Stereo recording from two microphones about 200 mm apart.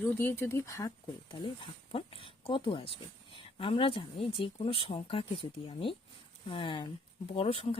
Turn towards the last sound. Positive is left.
turn(degrees=30)  # may be behind; listen again after turning